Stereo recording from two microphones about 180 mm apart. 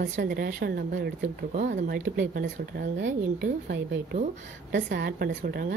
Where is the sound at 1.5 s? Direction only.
40° right (ahead or behind).